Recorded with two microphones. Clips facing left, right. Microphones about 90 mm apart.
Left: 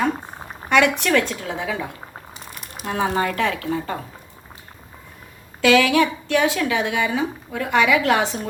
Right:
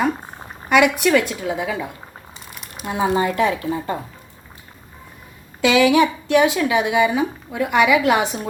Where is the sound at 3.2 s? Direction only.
20° right (ahead or behind).